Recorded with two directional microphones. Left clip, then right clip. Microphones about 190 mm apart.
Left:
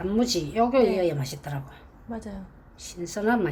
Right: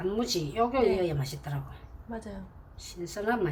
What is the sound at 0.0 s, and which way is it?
A woman's voice, 30° left (ahead or behind).